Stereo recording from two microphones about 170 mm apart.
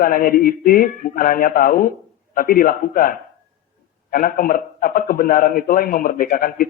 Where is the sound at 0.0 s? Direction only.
55° left (ahead or behind).